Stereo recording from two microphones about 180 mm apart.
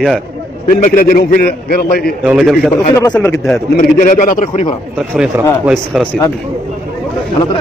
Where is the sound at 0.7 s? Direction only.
50° left (ahead or behind).